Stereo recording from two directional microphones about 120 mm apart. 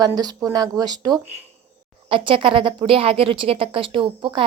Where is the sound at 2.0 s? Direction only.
45° right (ahead or behind).